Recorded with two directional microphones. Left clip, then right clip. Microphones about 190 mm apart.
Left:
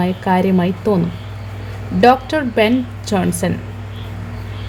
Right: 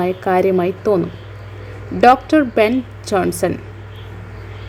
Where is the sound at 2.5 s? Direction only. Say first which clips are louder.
Even; 25° right (ahead or behind).